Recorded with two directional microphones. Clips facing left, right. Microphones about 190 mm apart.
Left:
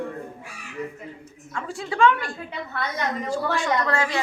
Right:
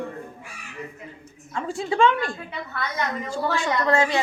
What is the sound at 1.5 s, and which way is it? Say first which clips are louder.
Speech: right 4 dB; 25° right (ahead or behind).